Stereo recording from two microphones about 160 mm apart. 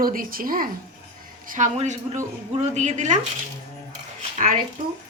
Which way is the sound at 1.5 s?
50° right (ahead or behind).